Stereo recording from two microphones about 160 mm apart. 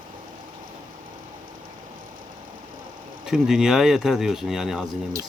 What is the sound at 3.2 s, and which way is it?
Speech, 5° right (ahead or behind).